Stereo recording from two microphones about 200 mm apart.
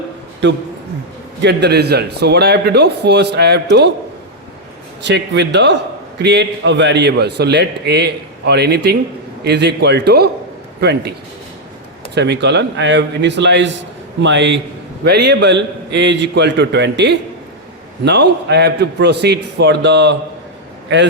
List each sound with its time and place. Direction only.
0.4 s a man's voice: 65° right (ahead or behind)
5.0 s a man's voice: 60° right (ahead or behind)
12.1 s a man's voice: 60° right (ahead or behind)